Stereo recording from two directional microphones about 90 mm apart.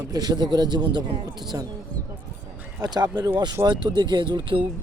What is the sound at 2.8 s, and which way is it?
Speech, 45° right (ahead or behind).